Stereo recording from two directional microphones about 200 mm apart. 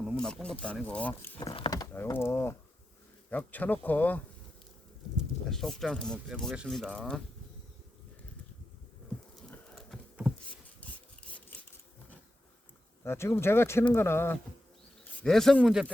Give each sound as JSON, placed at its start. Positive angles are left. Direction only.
{"t": 0.0, "sound": "speech", "side_deg": 0}
{"t": 1.4, "sound": "a sound", "side_deg": 25}
{"t": 3.2, "sound": "speech", "side_deg": 10}
{"t": 5.5, "sound": "speech", "side_deg": 0}
{"t": 9.5, "sound": "patter", "side_deg": 0}
{"t": 10.8, "sound": "sawing", "side_deg": 5}
{"t": 13.1, "sound": "speech", "side_deg": 10}